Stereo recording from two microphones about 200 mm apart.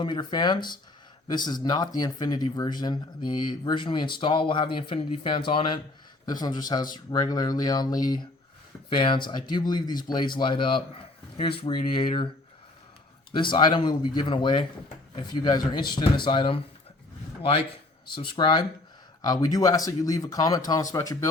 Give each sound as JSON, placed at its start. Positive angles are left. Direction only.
{"t": 0.0, "sound": "speech", "side_deg": 20}
{"t": 13.3, "sound": "speech", "side_deg": 25}
{"t": 18.1, "sound": "speech", "side_deg": 25}